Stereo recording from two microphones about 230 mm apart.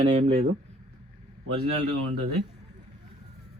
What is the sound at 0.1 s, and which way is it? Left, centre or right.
Speech, right.